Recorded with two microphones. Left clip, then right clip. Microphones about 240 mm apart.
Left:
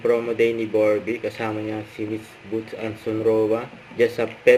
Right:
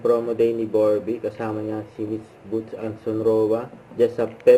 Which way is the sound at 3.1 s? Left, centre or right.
Left.